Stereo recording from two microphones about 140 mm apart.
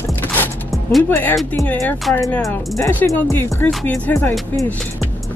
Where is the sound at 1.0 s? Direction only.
15° left (ahead or behind).